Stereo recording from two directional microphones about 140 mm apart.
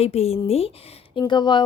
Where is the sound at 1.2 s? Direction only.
30° left (ahead or behind).